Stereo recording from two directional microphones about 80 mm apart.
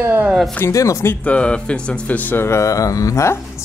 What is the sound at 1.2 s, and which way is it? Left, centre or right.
Speech, centre.